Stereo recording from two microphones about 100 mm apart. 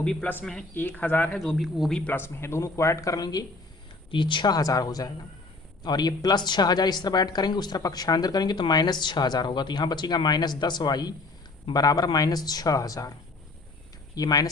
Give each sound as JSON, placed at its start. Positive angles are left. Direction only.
{"t": 0.0, "sound": "speech", "side_deg": 10}
{"t": 1.4, "sound": "speech", "side_deg": 0}
{"t": 2.0, "sound": "speech", "side_deg": 20}
{"t": 4.1, "sound": "a woman's voice", "side_deg": 55}
{"t": 14.2, "sound": "speech", "side_deg": 40}